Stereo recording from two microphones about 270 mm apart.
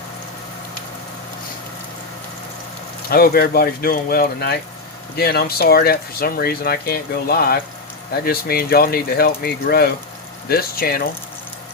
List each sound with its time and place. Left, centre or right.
3.1 s speech: left